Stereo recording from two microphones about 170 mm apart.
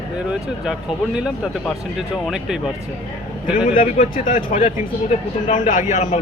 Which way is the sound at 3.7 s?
50° left (ahead or behind).